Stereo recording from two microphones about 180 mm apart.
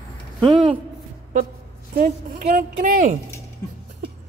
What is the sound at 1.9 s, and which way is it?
A woman's voice, 55° right (ahead or behind).